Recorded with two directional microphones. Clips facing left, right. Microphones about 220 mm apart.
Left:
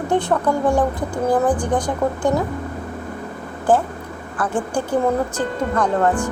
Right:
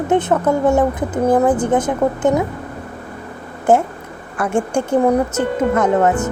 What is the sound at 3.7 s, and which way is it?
A woman's voice, 25° right (ahead or behind).